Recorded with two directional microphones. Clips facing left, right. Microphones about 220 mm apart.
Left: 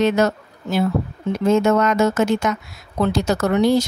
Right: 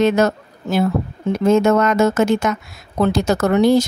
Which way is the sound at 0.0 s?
50° right (ahead or behind).